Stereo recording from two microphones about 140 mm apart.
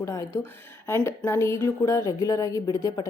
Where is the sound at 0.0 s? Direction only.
20° left (ahead or behind).